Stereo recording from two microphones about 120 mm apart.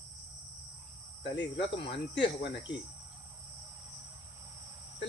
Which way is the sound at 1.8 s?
45° left (ahead or behind).